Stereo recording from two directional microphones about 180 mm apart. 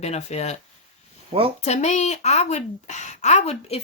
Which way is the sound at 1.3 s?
30° right (ahead or behind).